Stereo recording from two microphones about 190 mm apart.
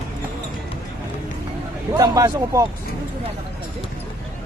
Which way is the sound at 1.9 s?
15° right (ahead or behind).